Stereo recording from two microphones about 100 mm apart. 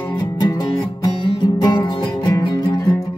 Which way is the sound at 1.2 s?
45° left (ahead or behind).